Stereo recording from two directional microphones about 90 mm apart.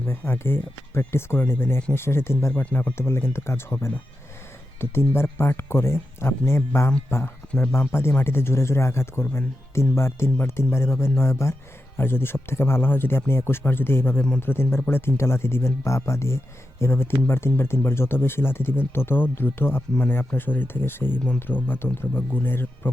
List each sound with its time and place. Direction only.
0.0 s speech: 25° left (ahead or behind)
7.4 s speech: 10° left (ahead or behind)
8.1 s speech: 25° left (ahead or behind)